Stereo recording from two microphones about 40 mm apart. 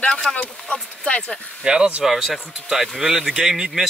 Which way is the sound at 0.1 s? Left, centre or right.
Centre.